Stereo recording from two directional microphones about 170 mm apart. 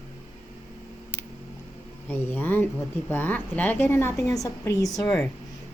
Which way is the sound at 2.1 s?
10° left (ahead or behind).